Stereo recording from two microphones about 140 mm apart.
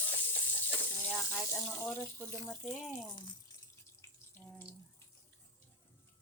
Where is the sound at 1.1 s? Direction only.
Centre (ahead or behind).